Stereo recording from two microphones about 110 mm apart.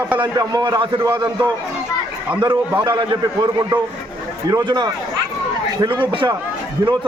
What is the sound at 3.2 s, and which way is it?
A man's voice, 35° right (ahead or behind).